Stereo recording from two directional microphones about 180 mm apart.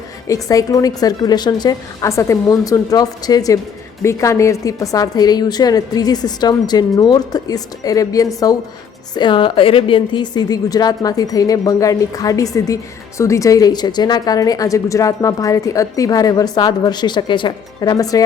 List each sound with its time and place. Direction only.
0.3 s a woman's voice: 20° left (ahead or behind)